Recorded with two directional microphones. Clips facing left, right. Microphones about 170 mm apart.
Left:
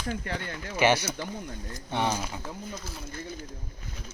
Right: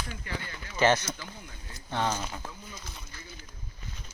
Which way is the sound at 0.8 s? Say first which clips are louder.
Left 1 dB; 10° left (ahead or behind).